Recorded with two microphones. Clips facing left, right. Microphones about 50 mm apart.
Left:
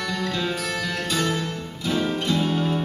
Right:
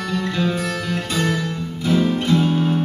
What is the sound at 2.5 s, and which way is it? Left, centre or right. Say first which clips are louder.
Music: right 4 dB; right.